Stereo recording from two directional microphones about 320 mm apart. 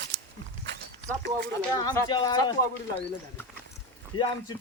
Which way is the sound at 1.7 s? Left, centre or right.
Centre.